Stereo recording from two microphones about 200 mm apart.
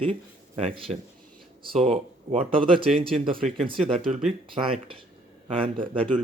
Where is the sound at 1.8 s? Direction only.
30° right (ahead or behind).